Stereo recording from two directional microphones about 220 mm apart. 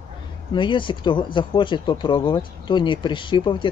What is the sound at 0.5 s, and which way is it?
Speech, 20° left (ahead or behind).